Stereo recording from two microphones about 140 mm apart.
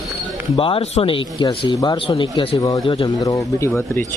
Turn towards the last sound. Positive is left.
turn(degrees=15)  # may be behind; listen again after turning